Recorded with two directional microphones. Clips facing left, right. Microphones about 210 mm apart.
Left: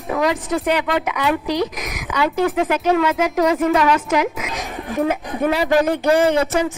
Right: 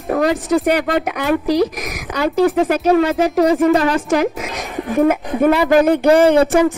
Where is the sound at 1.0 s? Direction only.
50° right (ahead or behind).